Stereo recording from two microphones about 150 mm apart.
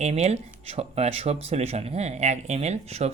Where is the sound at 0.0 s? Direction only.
45° right (ahead or behind).